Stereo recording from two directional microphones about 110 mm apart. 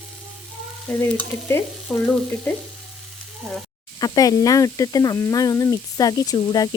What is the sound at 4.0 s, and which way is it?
Speech, 35° left (ahead or behind).